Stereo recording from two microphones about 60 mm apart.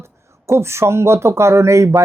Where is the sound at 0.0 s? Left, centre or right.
Right.